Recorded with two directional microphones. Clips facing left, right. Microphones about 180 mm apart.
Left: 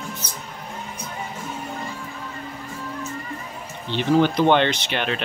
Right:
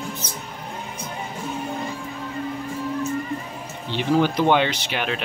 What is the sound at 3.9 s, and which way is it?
Speech, 10° right (ahead or behind).